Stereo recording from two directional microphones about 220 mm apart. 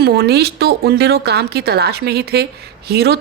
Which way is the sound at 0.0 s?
45° right (ahead or behind).